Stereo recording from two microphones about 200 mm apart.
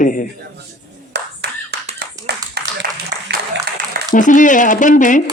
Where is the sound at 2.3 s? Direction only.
55° right (ahead or behind).